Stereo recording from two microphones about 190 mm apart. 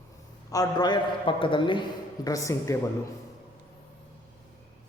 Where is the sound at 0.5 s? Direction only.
20° left (ahead or behind).